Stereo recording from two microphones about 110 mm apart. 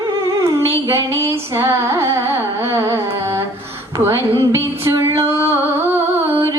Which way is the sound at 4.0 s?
25° right (ahead or behind).